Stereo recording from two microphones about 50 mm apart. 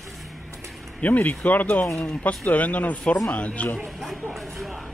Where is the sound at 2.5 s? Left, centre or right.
Left.